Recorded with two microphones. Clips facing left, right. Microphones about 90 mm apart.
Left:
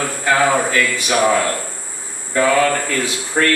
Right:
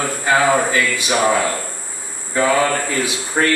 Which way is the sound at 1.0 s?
15° right (ahead or behind).